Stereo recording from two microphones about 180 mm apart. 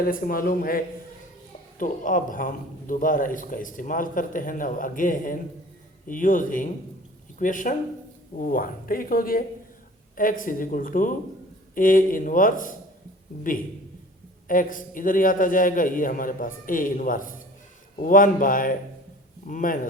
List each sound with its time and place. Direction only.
0.0 s a man's voice: 55° left (ahead or behind)
1.8 s a man's voice: 50° left (ahead or behind)
14.4 s a man's voice: 50° left (ahead or behind)